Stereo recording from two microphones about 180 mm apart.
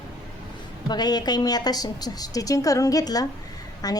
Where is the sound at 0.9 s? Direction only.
25° left (ahead or behind).